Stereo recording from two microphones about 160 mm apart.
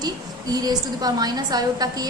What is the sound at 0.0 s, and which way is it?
A woman's voice, 25° right (ahead or behind).